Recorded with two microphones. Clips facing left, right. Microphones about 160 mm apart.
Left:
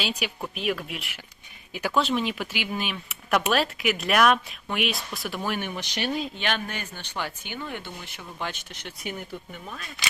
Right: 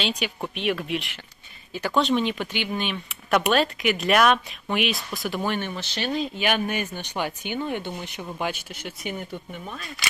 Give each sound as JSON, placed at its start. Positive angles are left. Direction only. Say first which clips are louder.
{"t": 0.0, "sound": "speech", "louder": "right 2 dB", "side_deg": 5}
{"t": 5.5, "sound": "speech", "louder": "right 1 dB", "side_deg": 10}
{"t": 6.4, "sound": "speech", "louder": "right 5 dB", "side_deg": -15}